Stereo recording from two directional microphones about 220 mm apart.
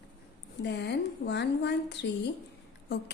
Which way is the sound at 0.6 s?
50° left (ahead or behind).